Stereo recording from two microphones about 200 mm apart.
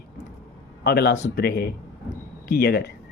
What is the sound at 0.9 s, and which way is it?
Speech, 55° left (ahead or behind).